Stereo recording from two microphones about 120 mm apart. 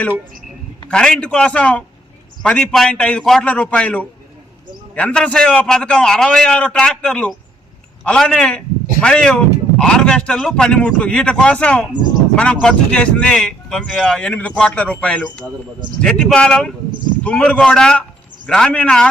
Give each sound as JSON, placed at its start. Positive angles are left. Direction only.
{"t": 0.9, "sound": "a man's voice", "side_deg": 5}